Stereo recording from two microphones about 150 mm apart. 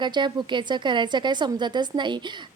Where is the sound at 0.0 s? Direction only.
30° right (ahead or behind).